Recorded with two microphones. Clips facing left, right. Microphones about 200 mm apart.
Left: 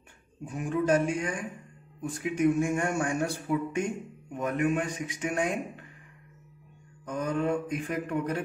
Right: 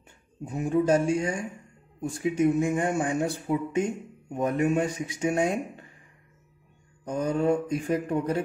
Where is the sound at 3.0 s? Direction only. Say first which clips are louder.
Right 2 dB; 20° right (ahead or behind).